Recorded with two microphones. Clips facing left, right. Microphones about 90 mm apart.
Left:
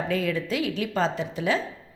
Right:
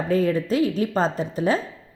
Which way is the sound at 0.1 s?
40° right (ahead or behind).